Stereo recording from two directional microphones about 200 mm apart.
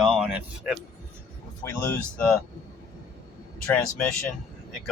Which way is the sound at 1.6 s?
10° left (ahead or behind).